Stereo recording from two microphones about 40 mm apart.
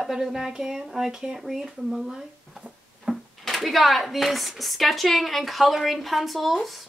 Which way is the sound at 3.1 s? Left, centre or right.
Right.